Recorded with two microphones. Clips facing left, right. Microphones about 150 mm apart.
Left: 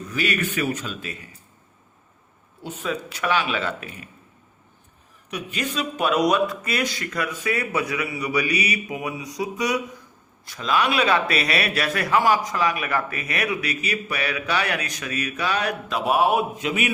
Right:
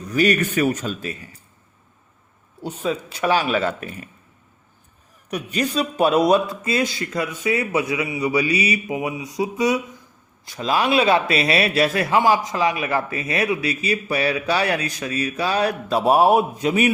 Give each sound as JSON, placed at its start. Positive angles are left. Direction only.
{"t": 0.1, "sound": "speech", "side_deg": -40}
{"t": 2.6, "sound": "speech", "side_deg": -30}
{"t": 5.3, "sound": "a man's voice", "side_deg": -40}